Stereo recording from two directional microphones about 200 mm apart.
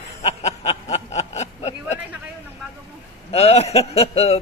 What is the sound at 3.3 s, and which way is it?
Speech, 30° left (ahead or behind).